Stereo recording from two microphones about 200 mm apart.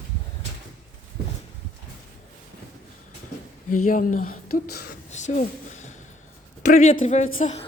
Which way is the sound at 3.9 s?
40° left (ahead or behind).